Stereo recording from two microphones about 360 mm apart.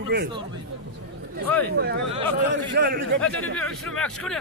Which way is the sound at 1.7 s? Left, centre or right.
Right.